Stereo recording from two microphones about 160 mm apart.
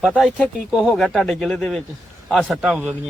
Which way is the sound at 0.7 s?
5° right (ahead or behind).